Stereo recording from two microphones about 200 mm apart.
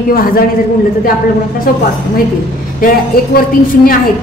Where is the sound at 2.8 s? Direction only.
45° left (ahead or behind).